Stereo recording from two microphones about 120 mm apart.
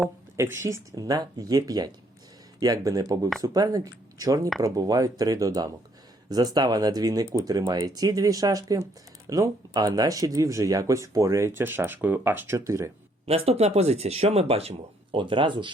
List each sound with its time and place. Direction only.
0.3 s speech: 20° right (ahead or behind)
13.2 s speech: 55° right (ahead or behind)
15.1 s speech: 45° right (ahead or behind)